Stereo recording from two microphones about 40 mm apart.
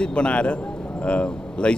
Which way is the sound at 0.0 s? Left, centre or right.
Left.